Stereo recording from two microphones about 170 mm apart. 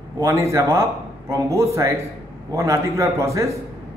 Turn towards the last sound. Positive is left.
turn(degrees=-20)  # may be behind; listen again after turning